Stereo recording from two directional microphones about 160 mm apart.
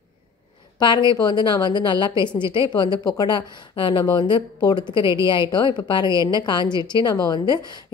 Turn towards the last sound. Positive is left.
turn(degrees=25)  # may be behind; listen again after turning